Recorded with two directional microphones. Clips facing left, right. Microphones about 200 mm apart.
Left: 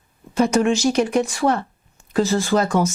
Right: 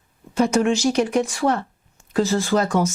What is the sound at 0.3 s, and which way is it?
Speech, 15° left (ahead or behind).